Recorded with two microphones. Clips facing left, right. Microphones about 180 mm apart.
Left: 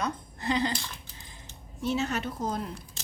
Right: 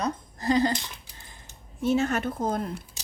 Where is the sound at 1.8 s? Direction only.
50° right (ahead or behind).